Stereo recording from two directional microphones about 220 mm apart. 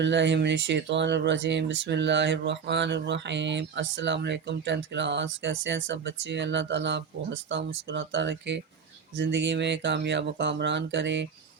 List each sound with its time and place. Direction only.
0.0 s speech: 55° right (ahead or behind)